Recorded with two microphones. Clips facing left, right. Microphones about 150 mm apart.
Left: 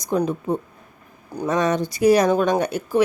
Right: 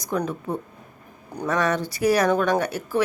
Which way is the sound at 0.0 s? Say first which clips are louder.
Left 4 dB; 20° left (ahead or behind).